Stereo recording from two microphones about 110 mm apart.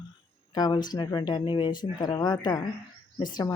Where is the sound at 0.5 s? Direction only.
40° left (ahead or behind).